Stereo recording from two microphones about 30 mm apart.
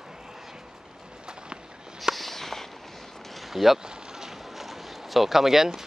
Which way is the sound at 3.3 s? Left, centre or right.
Centre.